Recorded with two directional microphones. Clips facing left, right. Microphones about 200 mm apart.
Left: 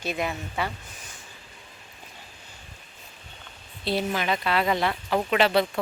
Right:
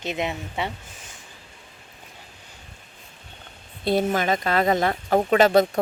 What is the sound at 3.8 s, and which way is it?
Speech, 50° right (ahead or behind).